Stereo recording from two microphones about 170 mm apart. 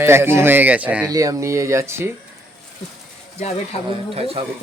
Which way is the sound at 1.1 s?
20° right (ahead or behind).